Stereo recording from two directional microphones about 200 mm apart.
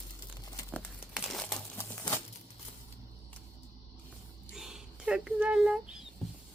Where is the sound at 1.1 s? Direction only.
Centre (ahead or behind).